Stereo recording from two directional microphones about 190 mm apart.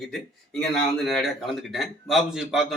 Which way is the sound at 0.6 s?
Centre (ahead or behind).